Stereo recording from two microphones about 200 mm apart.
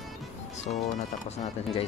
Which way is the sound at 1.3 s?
30° left (ahead or behind).